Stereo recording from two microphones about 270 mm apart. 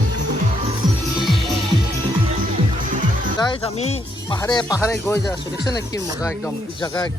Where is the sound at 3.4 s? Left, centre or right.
Centre.